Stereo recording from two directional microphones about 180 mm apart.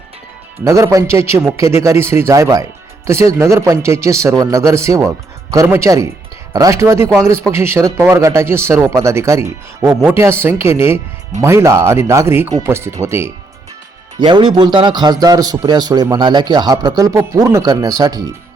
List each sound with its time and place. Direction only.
0.6 s speech: 15° right (ahead or behind)
14.2 s a man's voice: 25° right (ahead or behind)